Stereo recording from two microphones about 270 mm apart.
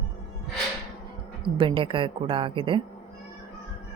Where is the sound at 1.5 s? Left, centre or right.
Centre.